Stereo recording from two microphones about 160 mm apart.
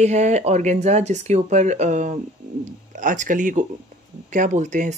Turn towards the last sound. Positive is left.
turn(degrees=-50)  # may be behind; listen again after turning